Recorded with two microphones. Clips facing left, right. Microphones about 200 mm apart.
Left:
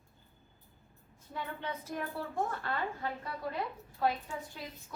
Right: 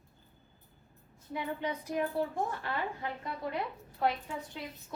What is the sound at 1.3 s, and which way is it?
A woman's voice, 15° right (ahead or behind).